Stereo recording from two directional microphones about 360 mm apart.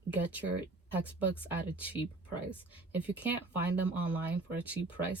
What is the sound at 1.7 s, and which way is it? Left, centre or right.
Speech, centre.